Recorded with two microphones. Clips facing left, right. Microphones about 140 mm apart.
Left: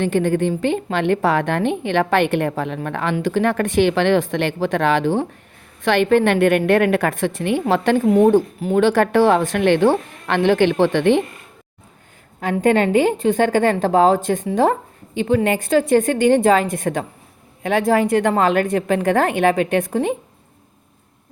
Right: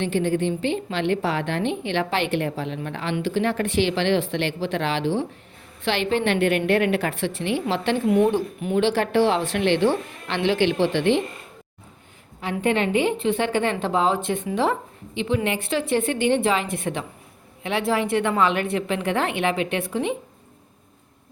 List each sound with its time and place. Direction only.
0.0 s a woman's voice: 50° left (ahead or behind)
12.4 s a woman's voice: 45° left (ahead or behind)